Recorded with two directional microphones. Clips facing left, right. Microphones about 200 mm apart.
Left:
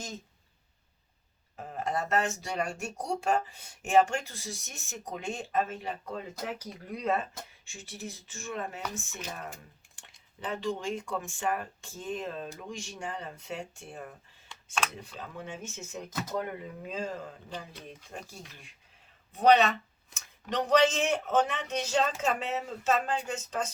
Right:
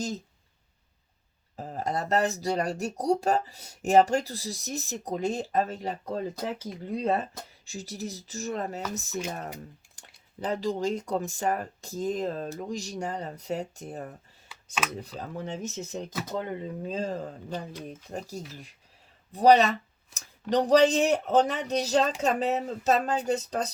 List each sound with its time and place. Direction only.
1.5 s speech: 35° right (ahead or behind)
6.4 s speech: 25° right (ahead or behind)
10.0 s a sound: 40° right (ahead or behind)
10.4 s speech: 40° right (ahead or behind)
16.3 s speech: 25° right (ahead or behind)